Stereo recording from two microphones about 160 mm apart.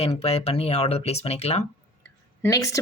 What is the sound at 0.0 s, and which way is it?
Speech, 40° left (ahead or behind).